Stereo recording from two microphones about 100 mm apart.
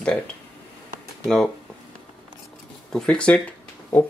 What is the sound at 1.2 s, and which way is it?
Speech, 5° left (ahead or behind).